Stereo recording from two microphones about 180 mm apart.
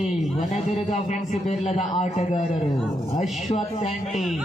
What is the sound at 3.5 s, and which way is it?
Speech, 40° left (ahead or behind).